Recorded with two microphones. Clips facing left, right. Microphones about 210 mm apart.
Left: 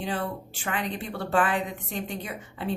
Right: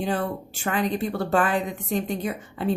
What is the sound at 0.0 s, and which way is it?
Speech, 45° right (ahead or behind).